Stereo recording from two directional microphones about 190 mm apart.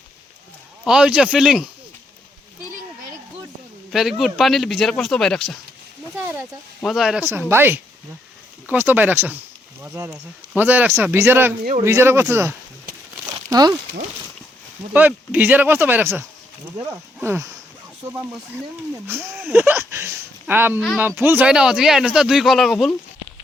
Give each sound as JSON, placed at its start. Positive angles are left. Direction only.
{"t": 0.9, "sound": "speech", "side_deg": -5}
{"t": 3.9, "sound": "speech", "side_deg": 0}
{"t": 6.1, "sound": "speech", "side_deg": -10}
{"t": 6.8, "sound": "speech", "side_deg": 0}
{"t": 7.3, "sound": "speech", "side_deg": -10}
{"t": 13.2, "sound": "crumpling", "side_deg": -20}
{"t": 14.9, "sound": "speech", "side_deg": -10}
{"t": 19.0, "sound": "speech", "side_deg": -10}